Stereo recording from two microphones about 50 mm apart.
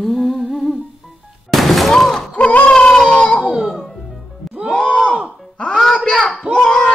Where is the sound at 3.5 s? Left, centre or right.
Centre.